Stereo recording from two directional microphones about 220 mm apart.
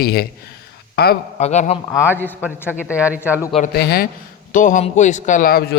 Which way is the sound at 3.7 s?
45° left (ahead or behind).